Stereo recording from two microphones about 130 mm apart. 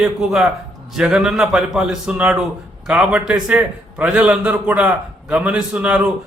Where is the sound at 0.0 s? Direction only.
5° right (ahead or behind).